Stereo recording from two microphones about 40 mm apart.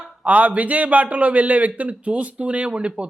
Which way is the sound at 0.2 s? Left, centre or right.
Right.